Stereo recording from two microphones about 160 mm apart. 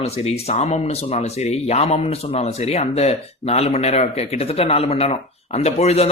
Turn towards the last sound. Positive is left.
turn(degrees=40)  # may be behind; listen again after turning